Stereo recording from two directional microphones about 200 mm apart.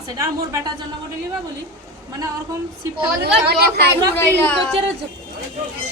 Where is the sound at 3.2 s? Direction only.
55° right (ahead or behind).